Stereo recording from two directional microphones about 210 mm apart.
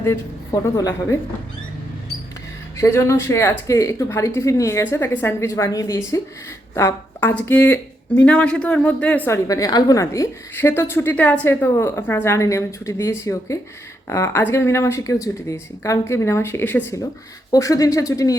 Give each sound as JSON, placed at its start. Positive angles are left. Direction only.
{"t": 0.5, "sound": "speech", "side_deg": 15}
{"t": 2.7, "sound": "speech", "side_deg": 15}